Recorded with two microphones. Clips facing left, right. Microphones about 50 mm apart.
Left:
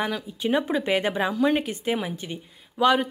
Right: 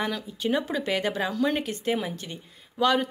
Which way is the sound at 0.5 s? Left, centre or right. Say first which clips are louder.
Left 5 dB; left.